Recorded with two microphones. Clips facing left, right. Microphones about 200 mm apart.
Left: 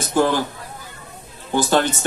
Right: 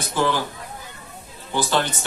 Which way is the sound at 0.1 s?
45° left (ahead or behind).